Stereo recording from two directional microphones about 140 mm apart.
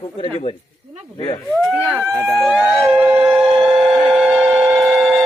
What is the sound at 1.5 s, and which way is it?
Speech, centre (ahead or behind).